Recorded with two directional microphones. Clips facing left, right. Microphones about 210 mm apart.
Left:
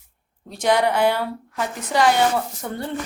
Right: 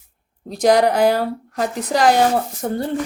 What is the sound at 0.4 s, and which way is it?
A woman's voice, 40° right (ahead or behind).